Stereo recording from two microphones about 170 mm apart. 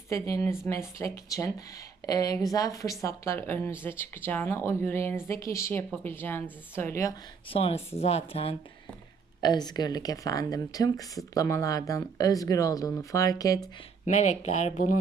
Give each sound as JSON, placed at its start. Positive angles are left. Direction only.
{"t": 0.1, "sound": "speech", "side_deg": 15}
{"t": 7.5, "sound": "speech", "side_deg": 35}
{"t": 14.0, "sound": "speech", "side_deg": 45}